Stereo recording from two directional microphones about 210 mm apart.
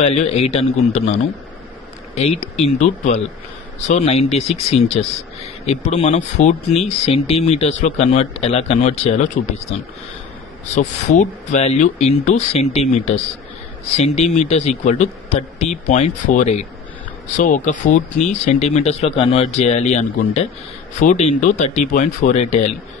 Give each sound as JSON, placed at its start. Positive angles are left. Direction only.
{"t": 0.0, "sound": "speech", "side_deg": 30}